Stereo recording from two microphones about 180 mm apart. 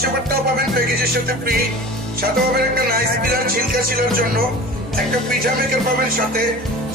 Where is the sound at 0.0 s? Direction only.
55° right (ahead or behind).